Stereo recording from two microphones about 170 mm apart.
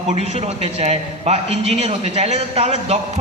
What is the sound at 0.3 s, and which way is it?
A man's voice, 40° right (ahead or behind).